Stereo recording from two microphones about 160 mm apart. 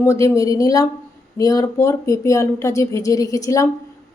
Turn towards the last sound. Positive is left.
turn(degrees=20)  # may be behind; listen again after turning